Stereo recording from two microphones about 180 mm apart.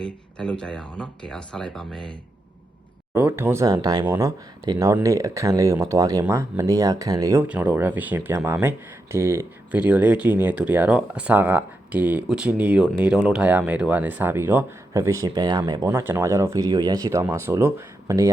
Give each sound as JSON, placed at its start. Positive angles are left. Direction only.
{"t": 0.0, "sound": "speech", "side_deg": 5}
{"t": 3.2, "sound": "speech", "side_deg": -10}